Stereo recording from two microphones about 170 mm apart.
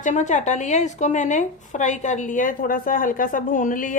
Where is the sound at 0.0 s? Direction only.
45° left (ahead or behind).